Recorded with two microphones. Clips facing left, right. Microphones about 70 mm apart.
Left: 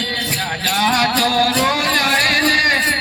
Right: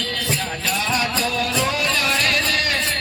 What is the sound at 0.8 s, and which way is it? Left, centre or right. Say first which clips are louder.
Music: left 7 dB; left.